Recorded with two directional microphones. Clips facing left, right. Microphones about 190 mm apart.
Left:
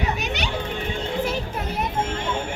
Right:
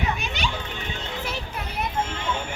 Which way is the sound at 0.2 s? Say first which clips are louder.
Left 2 dB; 70° left (ahead or behind).